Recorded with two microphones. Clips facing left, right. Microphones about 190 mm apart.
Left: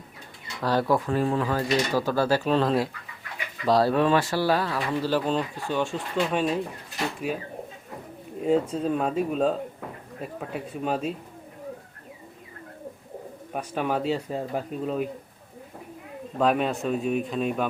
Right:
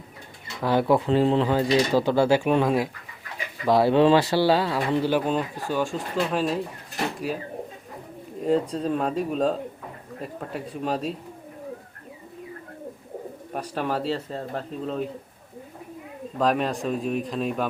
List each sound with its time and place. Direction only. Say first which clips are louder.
0.6 s speech: right 3 dB; 15° right (ahead or behind); by 6.6 s centre (ahead or behind)
8.4 s speech: even; centre (ahead or behind)
13.5 s speech: left 1 dB; 5° left (ahead or behind)
16.4 s speech: even; 5° left (ahead or behind)